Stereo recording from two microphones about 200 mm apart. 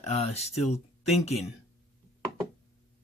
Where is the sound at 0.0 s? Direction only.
30° left (ahead or behind).